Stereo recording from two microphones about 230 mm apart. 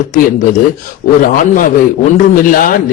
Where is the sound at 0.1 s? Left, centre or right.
Left.